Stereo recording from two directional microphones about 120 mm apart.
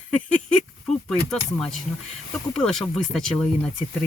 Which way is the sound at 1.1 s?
Centre (ahead or behind).